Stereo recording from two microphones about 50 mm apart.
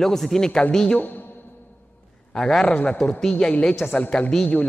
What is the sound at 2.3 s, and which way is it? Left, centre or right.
Speech, centre.